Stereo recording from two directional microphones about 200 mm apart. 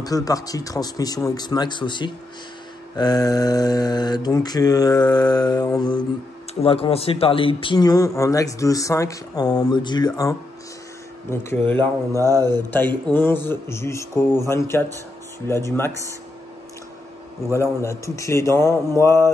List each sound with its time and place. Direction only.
0.0 s a man's voice: 20° left (ahead or behind)
12.1 s mantra: 15° right (ahead or behind)
12.7 s a man's voice: 10° left (ahead or behind)
17.5 s a man's voice: 15° left (ahead or behind)